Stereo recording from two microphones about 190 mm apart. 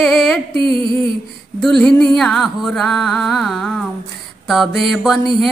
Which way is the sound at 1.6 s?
5° left (ahead or behind).